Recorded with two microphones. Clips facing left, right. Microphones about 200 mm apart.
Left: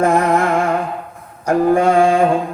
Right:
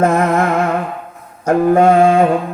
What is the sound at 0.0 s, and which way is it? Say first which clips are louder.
Music: right 1 dB; 45° right (ahead or behind).